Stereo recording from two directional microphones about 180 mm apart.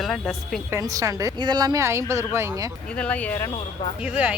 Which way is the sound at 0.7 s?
15° right (ahead or behind).